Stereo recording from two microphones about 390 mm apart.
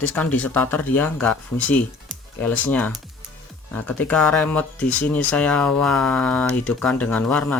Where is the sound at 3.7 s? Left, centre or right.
Centre.